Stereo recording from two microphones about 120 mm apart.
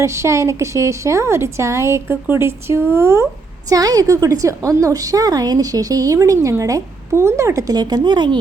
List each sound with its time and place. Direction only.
0.0 s a woman's voice: 25° right (ahead or behind); by 8.4 s 40° right (ahead or behind)